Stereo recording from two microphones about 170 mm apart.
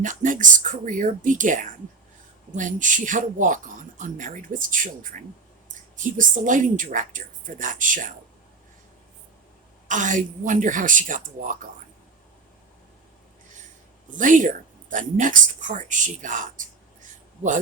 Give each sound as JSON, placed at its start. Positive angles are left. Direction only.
{"t": 0.0, "sound": "speech", "side_deg": -50}
{"t": 6.0, "sound": "speech", "side_deg": -50}
{"t": 9.9, "sound": "speech", "side_deg": -50}
{"t": 14.2, "sound": "speech", "side_deg": -50}